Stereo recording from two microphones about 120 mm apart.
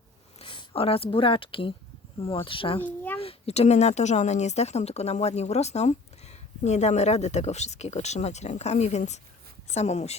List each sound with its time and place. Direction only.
0.4 s speech: 50° left (ahead or behind)
2.8 s a child's voice: 15° left (ahead or behind)
3.2 s a woman's voice: 55° left (ahead or behind)